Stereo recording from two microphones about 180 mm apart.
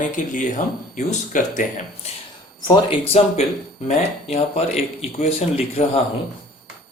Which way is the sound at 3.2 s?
35° left (ahead or behind).